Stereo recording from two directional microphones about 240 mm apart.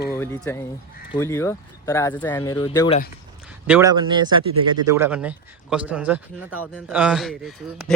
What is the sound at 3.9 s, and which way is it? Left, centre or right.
Speech, centre.